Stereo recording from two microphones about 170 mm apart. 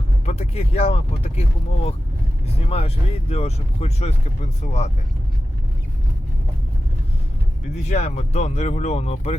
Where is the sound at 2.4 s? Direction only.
35° left (ahead or behind).